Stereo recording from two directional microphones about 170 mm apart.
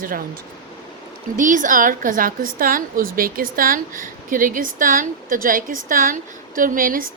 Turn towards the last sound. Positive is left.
turn(degrees=-55)  # may be behind; listen again after turning